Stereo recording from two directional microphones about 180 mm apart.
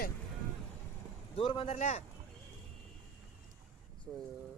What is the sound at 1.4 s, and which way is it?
Speech, 30° left (ahead or behind).